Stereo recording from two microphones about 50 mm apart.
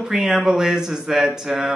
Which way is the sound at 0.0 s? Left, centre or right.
Centre.